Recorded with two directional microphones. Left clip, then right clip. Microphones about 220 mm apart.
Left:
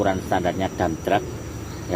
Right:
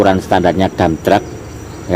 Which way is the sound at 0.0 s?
40° right (ahead or behind).